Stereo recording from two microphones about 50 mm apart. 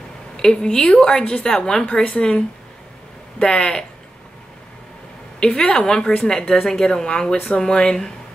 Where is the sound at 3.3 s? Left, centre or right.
Left.